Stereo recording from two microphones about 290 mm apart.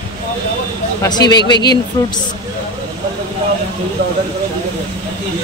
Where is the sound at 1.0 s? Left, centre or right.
Centre.